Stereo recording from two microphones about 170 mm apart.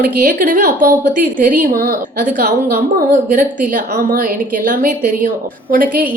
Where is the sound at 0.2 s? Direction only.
55° right (ahead or behind).